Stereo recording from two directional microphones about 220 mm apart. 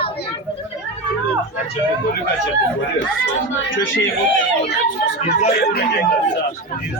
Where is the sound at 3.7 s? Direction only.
60° left (ahead or behind).